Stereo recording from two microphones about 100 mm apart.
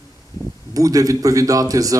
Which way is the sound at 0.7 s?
35° right (ahead or behind).